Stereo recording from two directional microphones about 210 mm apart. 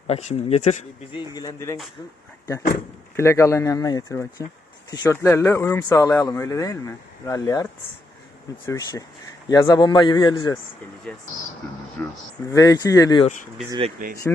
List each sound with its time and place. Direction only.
0.1 s speech: 30° left (ahead or behind)
1.2 s speech: 20° left (ahead or behind)
3.2 s a man's voice: 15° left (ahead or behind)
12.0 s speech: 10° left (ahead or behind)
13.7 s speech: 25° right (ahead or behind)
14.3 s speech: 5° left (ahead or behind)